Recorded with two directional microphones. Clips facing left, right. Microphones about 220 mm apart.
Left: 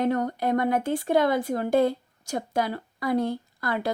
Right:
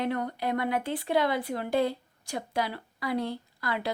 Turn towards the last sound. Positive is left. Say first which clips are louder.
# left 4 dB
turn(degrees=45)  # may be behind; listen again after turning